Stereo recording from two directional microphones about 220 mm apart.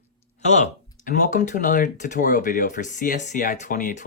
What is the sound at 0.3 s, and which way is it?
Speech, 30° left (ahead or behind).